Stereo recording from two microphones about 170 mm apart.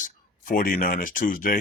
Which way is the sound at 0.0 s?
55° left (ahead or behind).